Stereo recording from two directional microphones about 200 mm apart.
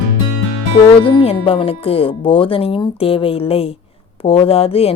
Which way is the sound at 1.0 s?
25° left (ahead or behind).